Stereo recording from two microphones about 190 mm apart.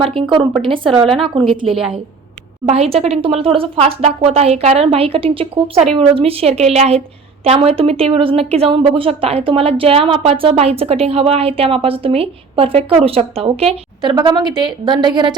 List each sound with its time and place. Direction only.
0.0 s speech: 30° right (ahead or behind)
2.6 s a woman's voice: 35° right (ahead or behind)